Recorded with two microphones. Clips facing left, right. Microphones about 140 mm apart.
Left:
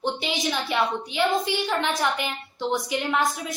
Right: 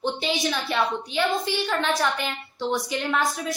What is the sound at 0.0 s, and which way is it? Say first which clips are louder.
A woman's voice: right 1 dB; 15° left (ahead or behind).